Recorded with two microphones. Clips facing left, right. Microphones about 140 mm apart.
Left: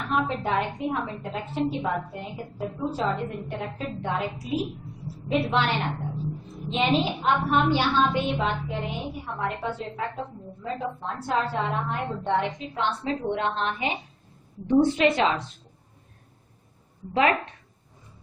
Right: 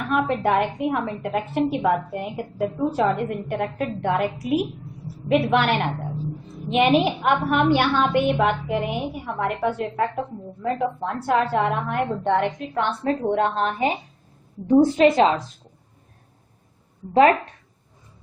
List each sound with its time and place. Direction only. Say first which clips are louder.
0.0 s a woman's voice: right 5 dB; 60° right (ahead or behind); by 15.4 s 40° right (ahead or behind)